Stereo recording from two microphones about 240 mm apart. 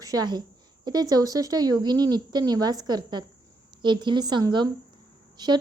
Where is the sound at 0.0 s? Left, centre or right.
Centre.